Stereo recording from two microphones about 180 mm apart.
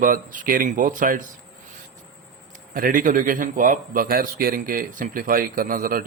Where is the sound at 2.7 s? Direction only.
50° right (ahead or behind).